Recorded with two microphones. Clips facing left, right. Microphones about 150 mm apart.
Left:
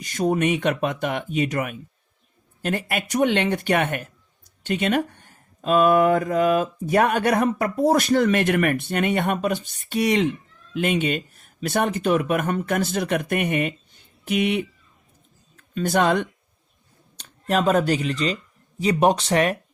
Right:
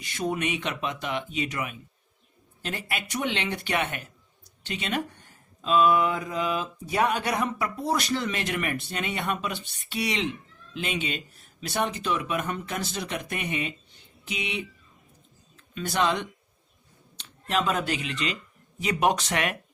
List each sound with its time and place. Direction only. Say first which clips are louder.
0.0 s speech: left 7 dB; 45° left (ahead or behind)